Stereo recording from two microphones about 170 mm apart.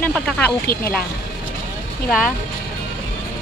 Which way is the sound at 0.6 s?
60° left (ahead or behind).